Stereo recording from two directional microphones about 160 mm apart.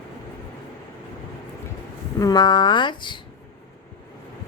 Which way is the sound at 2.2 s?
25° left (ahead or behind).